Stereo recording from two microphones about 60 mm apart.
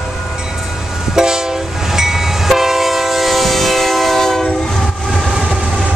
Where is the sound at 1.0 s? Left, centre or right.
Centre.